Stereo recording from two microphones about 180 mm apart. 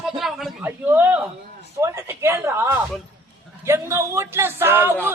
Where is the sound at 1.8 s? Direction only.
15° right (ahead or behind).